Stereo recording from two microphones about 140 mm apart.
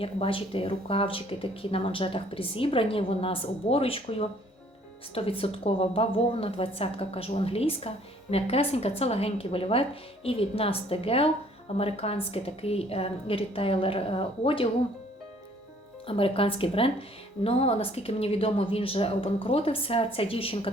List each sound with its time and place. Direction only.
0.0 s a woman's voice: 40° left (ahead or behind)
16.0 s a woman's voice: 40° left (ahead or behind)